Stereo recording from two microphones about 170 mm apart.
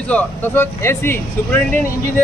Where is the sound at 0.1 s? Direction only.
10° left (ahead or behind).